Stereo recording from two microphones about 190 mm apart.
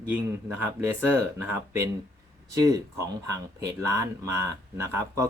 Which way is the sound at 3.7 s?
15° right (ahead or behind).